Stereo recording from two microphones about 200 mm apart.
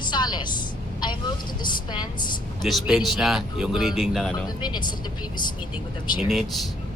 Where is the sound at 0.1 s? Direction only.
20° left (ahead or behind).